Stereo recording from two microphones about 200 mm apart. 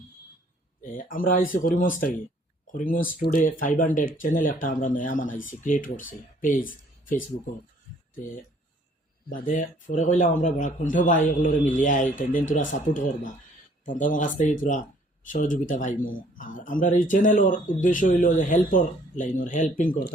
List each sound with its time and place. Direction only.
0.9 s speech: 45° left (ahead or behind)
9.3 s a man's voice: 45° left (ahead or behind)